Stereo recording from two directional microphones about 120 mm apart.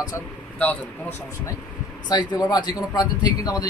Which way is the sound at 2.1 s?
35° left (ahead or behind).